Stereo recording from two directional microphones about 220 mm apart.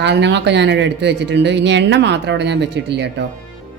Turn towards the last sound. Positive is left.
turn(degrees=-50)  # may be behind; listen again after turning